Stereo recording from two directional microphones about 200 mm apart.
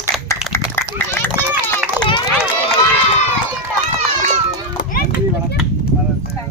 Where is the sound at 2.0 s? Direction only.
25° left (ahead or behind).